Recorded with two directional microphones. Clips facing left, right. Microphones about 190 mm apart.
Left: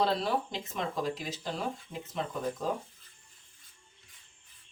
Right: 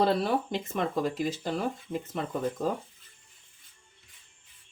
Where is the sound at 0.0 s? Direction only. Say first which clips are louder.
Right 4 dB; 55° right (ahead or behind).